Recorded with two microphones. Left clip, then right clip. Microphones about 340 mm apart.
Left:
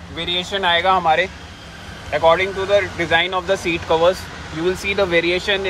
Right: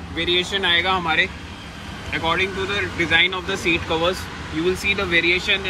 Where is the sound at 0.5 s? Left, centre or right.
Centre.